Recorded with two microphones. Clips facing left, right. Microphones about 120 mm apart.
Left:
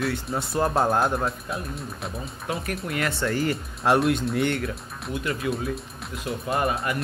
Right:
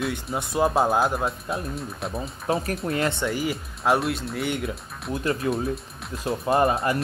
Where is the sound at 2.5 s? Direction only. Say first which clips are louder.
Right 4 dB; 35° right (ahead or behind).